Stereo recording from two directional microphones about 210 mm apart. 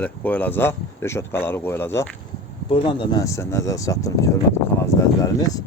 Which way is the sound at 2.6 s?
25° left (ahead or behind).